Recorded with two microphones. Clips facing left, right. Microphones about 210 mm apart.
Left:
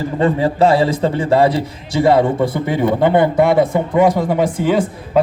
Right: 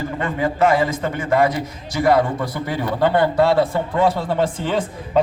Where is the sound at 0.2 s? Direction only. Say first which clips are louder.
Left 6 dB; 35° left (ahead or behind).